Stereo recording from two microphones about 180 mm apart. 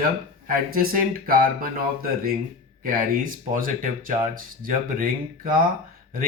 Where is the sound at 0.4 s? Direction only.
50° right (ahead or behind).